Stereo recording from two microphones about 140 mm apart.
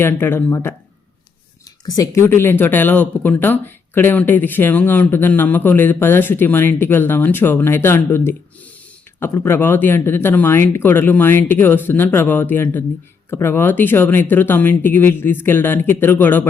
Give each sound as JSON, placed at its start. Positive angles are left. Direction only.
{"t": 0.0, "sound": "speech", "side_deg": 15}
{"t": 1.8, "sound": "speech", "side_deg": 25}